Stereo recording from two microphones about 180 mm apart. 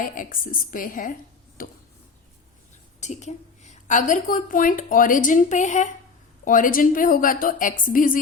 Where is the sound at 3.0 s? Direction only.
40° left (ahead or behind).